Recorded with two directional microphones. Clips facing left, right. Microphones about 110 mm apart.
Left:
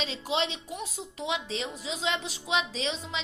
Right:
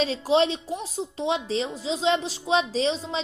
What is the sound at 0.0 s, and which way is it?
A woman's voice, 40° right (ahead or behind).